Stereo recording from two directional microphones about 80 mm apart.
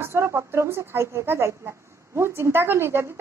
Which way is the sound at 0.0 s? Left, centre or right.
Right.